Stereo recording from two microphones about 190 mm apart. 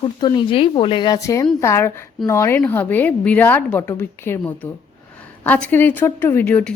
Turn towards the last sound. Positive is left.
turn(degrees=10)  # may be behind; listen again after turning